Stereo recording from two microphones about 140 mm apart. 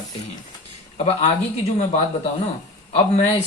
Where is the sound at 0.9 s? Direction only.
50° left (ahead or behind).